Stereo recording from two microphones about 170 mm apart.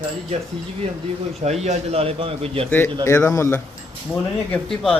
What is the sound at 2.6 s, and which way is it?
Speech, 10° left (ahead or behind).